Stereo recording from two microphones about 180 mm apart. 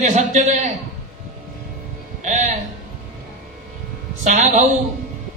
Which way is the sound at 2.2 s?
40° right (ahead or behind).